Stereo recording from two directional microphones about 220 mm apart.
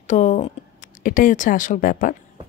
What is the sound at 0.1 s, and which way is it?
A woman's voice, 35° left (ahead or behind).